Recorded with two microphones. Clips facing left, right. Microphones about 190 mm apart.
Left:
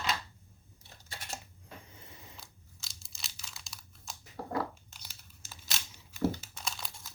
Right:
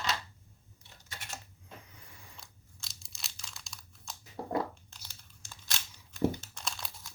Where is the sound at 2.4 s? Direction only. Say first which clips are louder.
Even; centre (ahead or behind).